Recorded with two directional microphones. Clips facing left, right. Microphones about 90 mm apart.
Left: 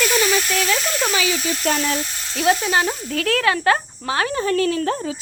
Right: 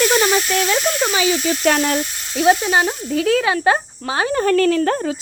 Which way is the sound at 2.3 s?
20° right (ahead or behind).